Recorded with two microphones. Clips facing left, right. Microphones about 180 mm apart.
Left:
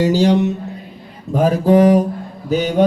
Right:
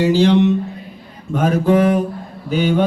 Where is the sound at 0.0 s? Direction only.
40° left (ahead or behind).